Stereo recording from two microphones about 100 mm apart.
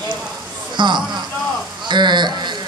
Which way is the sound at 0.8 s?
50° right (ahead or behind).